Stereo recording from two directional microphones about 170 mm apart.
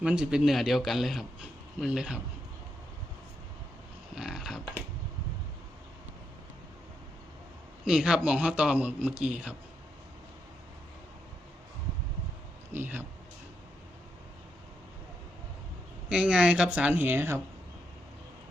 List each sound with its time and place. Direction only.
0.0 s a man's voice: 5° right (ahead or behind)
4.1 s a sound: 5° right (ahead or behind)
7.9 s a man's voice: 5° right (ahead or behind)
12.7 s a man's voice: 10° right (ahead or behind)
16.0 s a man's voice: 5° right (ahead or behind)